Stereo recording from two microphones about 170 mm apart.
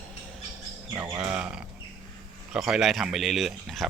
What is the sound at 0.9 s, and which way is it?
Speech, 20° right (ahead or behind).